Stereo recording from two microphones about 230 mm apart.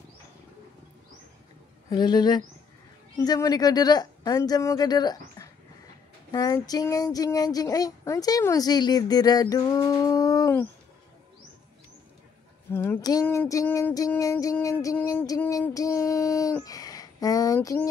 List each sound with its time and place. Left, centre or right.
1.9 s female singing: centre
12.7 s female singing: centre